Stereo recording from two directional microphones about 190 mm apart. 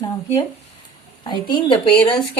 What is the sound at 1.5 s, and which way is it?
Speech, 25° left (ahead or behind).